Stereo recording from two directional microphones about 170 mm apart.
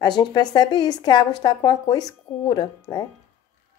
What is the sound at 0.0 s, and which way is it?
Speech, 25° left (ahead or behind).